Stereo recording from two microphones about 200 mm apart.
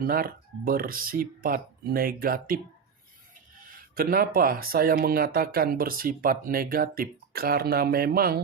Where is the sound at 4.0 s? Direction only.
45° right (ahead or behind).